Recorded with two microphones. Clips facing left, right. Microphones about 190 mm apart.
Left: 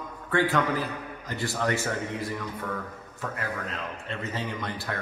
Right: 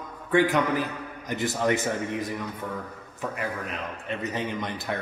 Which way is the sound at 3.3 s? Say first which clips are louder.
Right 1 dB; 15° right (ahead or behind).